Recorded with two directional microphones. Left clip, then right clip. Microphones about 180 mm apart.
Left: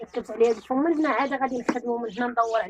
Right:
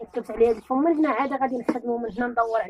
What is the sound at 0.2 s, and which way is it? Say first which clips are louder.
Speech: right 1 dB; 20° right (ahead or behind).